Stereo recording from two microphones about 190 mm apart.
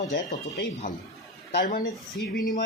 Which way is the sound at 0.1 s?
55° left (ahead or behind).